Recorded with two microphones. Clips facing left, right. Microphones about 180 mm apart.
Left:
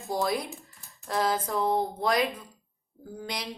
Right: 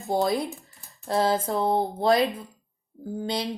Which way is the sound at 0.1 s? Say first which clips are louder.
Right 4 dB; 25° right (ahead or behind).